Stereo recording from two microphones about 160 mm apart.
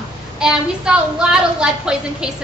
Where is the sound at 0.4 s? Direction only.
5° right (ahead or behind).